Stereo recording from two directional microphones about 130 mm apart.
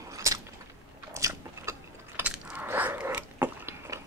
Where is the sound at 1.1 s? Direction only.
20° right (ahead or behind).